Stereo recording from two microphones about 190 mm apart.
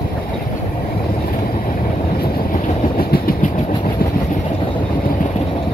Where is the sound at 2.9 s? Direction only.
50° left (ahead or behind).